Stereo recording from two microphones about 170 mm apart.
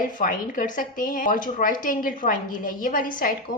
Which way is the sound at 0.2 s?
50° left (ahead or behind).